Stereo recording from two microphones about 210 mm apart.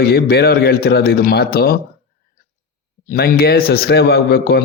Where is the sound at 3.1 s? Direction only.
45° left (ahead or behind).